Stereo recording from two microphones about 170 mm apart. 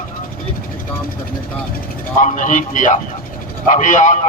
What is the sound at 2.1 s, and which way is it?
Speech, 50° left (ahead or behind).